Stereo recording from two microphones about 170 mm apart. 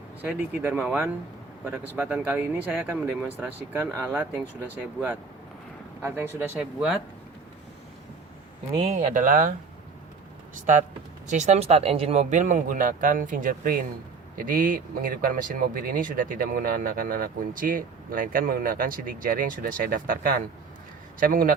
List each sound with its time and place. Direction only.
0.2 s speech: 10° right (ahead or behind)
8.7 s speech: 40° right (ahead or behind)
11.3 s speech: 45° right (ahead or behind)